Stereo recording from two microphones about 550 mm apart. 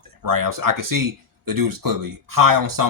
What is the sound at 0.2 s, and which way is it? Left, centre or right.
Speech, right.